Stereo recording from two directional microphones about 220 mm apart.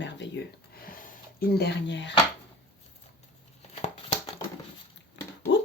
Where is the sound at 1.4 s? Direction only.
50° left (ahead or behind).